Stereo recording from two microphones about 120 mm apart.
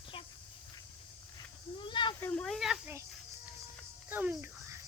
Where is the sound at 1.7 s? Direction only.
40° left (ahead or behind).